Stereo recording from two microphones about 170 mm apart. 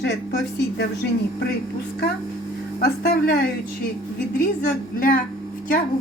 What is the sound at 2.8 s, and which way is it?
Speech, 65° left (ahead or behind).